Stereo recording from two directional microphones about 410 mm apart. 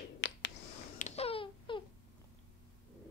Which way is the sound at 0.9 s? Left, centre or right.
Centre.